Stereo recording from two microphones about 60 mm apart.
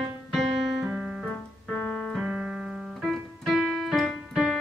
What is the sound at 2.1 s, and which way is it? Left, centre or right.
Piano, centre.